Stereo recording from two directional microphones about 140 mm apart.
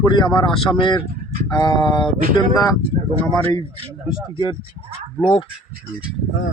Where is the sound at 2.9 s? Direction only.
50° right (ahead or behind).